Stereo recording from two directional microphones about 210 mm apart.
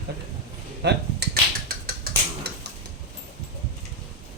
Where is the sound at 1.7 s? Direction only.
45° right (ahead or behind).